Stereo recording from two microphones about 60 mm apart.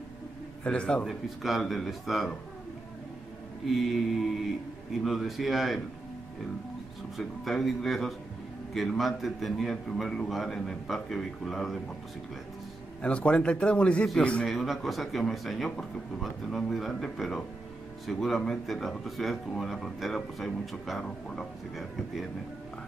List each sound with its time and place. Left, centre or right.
0.7 s a man's voice: centre
1.0 s speech: centre
3.6 s speech: centre
5.0 s speech: centre
7.2 s speech: centre
13.0 s a man's voice: centre
14.4 s speech: centre